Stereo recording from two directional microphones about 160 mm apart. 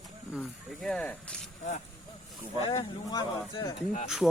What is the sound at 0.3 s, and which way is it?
Speech, centre (ahead or behind).